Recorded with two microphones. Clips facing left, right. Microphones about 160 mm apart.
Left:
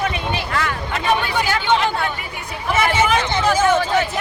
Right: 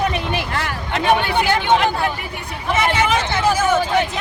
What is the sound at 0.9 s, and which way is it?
Hubbub, 65° right (ahead or behind).